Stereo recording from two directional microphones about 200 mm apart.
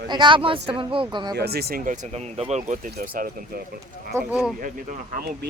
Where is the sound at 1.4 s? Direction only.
50° right (ahead or behind).